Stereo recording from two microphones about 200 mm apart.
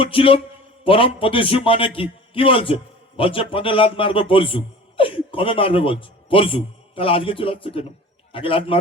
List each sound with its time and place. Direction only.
0.0 s a man's voice: 25° left (ahead or behind)